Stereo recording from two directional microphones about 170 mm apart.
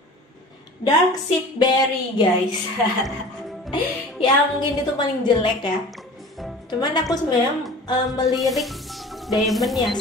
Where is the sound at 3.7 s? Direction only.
30° left (ahead or behind).